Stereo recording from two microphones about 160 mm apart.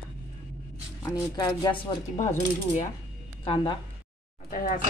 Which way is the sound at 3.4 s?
35° left (ahead or behind).